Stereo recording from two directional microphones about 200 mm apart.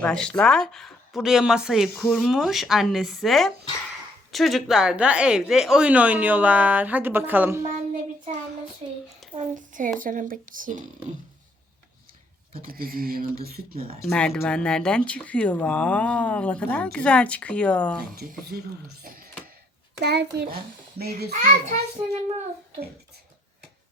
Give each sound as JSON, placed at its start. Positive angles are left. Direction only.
{"t": 0.0, "sound": "speech", "side_deg": 5}
{"t": 9.3, "sound": "a sound", "side_deg": -40}
{"t": 10.0, "sound": "speech", "side_deg": -45}
{"t": 12.6, "sound": "speech", "side_deg": -45}
{"t": 14.1, "sound": "speech", "side_deg": 5}
{"t": 18.1, "sound": "a child's voice", "side_deg": -50}